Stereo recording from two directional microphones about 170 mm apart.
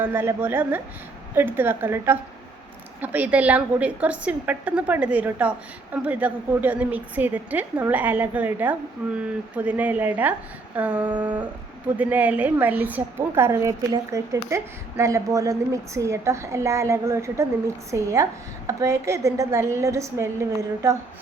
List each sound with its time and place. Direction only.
0.0 s a woman's voice: 15° right (ahead or behind)